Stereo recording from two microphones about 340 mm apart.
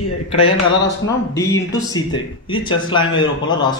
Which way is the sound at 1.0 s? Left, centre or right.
Centre.